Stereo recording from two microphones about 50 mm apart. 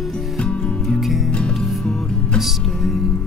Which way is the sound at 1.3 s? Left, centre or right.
Left.